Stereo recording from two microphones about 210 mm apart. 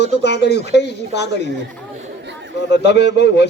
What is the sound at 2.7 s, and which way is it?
Speech, 55° left (ahead or behind).